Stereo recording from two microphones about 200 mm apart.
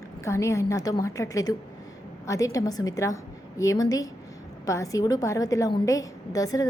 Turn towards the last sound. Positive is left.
turn(degrees=20)  # may be behind; listen again after turning